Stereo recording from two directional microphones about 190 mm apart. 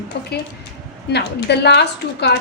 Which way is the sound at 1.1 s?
65° left (ahead or behind).